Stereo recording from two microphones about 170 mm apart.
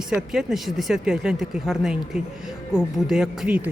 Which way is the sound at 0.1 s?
5° right (ahead or behind).